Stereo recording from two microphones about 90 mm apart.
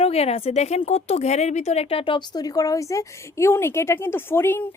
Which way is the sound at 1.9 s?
80° left.